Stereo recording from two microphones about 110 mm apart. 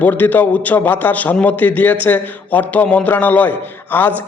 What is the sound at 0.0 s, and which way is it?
A man's voice, 15° left (ahead or behind).